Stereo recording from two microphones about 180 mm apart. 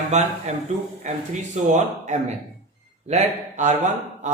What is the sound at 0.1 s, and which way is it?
A man's voice, 40° right (ahead or behind).